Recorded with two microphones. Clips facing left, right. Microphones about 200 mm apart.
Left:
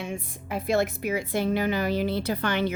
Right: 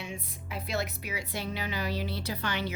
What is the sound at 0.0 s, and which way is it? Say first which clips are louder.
A woman's voice: left 7 dB; 50° left (ahead or behind).